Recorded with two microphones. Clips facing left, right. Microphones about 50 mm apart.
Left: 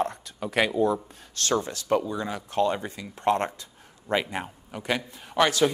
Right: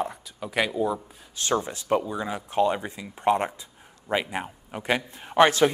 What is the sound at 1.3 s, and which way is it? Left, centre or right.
A man's voice, centre.